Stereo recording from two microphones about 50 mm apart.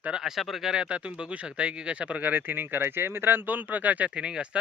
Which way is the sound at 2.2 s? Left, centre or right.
Right.